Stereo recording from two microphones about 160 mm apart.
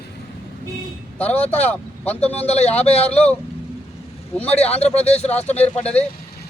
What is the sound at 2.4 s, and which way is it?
Speech, 45° left (ahead or behind).